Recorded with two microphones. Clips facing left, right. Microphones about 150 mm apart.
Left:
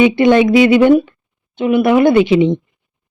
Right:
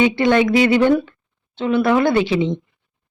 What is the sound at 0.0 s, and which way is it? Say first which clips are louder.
Speech: left 5 dB; 20° left (ahead or behind).